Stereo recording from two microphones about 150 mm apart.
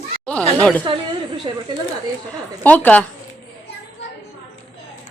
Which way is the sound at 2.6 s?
10° left (ahead or behind).